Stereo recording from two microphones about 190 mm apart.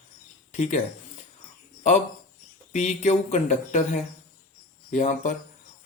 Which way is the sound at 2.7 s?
40° left (ahead or behind).